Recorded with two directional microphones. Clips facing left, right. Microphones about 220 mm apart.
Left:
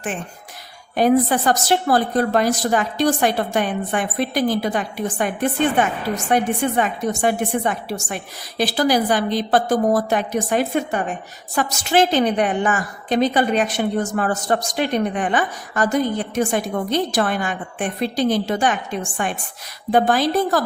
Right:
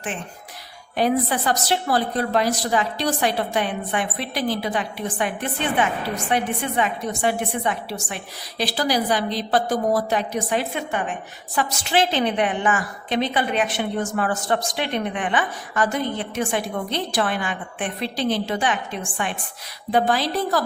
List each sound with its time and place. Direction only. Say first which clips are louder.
0.9 s a woman's voice: left 5 dB; 45° left (ahead or behind)